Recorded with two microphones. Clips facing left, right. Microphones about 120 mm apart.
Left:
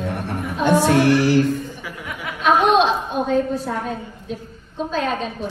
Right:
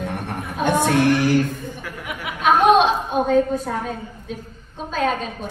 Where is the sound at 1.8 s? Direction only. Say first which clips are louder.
Even; 5° left (ahead or behind).